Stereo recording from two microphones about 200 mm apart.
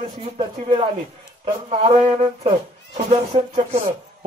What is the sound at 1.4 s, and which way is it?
Speech, 30° right (ahead or behind).